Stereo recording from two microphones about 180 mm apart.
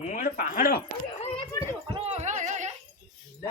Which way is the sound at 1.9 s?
40° right (ahead or behind).